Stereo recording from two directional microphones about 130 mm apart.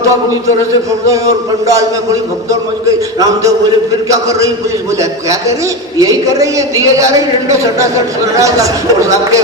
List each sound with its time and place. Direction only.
1.0 s a man's voice: 25° right (ahead or behind)
4.1 s a man's voice: 25° right (ahead or behind)